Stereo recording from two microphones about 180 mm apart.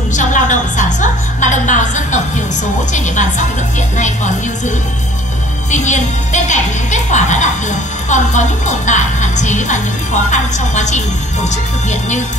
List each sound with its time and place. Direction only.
0.1 s music: 45° left (ahead or behind)
2.9 s a woman's voice: 45° left (ahead or behind)